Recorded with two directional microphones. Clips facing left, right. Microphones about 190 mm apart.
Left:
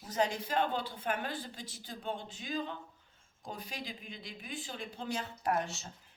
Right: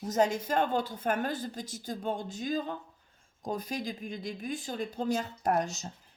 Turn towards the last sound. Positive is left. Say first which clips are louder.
# right 4 dB
turn(degrees=-40)  # may be behind; listen again after turning